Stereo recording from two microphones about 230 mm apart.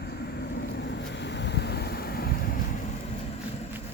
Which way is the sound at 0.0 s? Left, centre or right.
Left.